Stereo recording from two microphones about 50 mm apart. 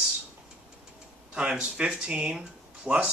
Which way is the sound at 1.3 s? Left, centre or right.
Right.